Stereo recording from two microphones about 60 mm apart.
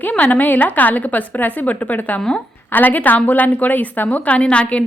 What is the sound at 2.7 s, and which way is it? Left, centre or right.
A woman's voice, left.